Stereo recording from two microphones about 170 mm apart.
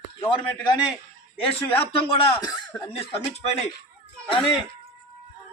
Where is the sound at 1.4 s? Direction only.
35° left (ahead or behind).